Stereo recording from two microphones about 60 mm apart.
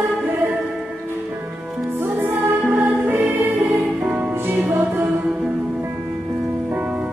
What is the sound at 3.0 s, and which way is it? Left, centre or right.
Music, right.